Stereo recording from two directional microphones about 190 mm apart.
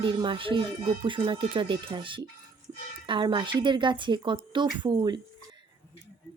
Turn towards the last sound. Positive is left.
turn(degrees=-20)  # may be behind; listen again after turning